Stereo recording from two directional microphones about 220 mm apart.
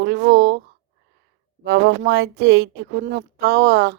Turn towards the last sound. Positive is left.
turn(degrees=-50)  # may be behind; listen again after turning